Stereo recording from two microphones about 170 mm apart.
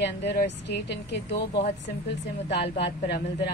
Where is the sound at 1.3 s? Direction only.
35° left (ahead or behind).